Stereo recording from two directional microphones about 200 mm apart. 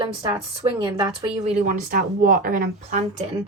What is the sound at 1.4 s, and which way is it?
A woman's voice, 40° right (ahead or behind).